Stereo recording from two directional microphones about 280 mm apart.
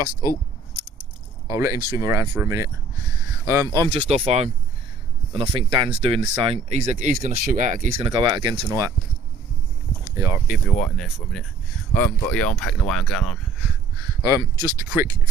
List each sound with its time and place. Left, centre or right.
1.5 s speech: centre; by 8.1 s right
8.1 s speech: centre
10.2 s speech: centre
14.2 s speech: centre